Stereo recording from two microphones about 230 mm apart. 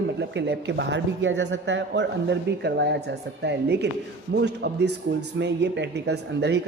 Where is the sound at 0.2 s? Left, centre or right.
Right.